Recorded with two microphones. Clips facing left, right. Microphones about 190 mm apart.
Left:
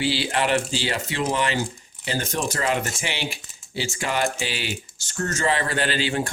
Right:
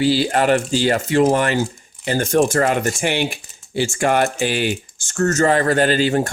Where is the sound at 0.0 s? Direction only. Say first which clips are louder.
Right 7 dB; 45° right (ahead or behind).